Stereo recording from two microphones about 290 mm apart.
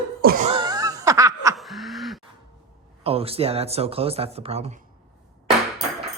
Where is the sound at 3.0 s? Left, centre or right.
Centre.